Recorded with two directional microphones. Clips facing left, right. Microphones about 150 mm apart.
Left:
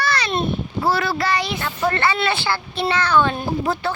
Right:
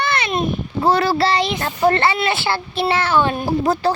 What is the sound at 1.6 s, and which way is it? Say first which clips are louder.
Speech: right 5 dB; 35° right (ahead or behind).